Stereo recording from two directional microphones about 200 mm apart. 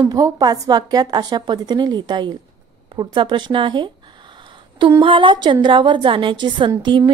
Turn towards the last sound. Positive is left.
turn(degrees=-20)  # may be behind; listen again after turning